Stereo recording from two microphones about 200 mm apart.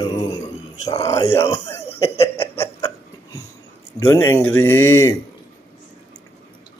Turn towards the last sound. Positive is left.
turn(degrees=15)  # may be behind; listen again after turning